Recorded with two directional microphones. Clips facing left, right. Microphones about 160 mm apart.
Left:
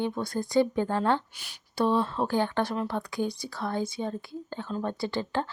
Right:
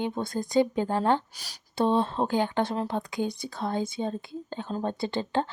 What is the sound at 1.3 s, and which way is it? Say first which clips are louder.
Speech: right 2 dB; 40° right (ahead or behind).